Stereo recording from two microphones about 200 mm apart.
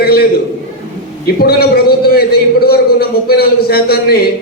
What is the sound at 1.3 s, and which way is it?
A man's voice, 50° left (ahead or behind).